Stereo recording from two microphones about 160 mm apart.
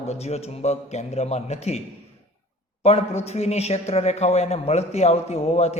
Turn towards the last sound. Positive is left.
turn(degrees=45)  # may be behind; listen again after turning